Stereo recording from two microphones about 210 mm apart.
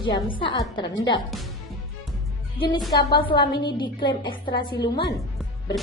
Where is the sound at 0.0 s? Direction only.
25° left (ahead or behind).